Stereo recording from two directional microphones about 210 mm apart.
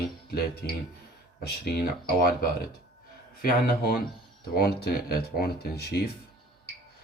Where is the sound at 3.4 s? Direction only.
45° left (ahead or behind).